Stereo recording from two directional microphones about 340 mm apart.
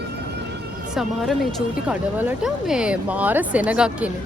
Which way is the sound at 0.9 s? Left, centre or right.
Centre.